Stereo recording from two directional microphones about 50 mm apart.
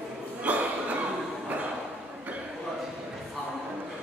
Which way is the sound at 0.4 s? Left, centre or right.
Right.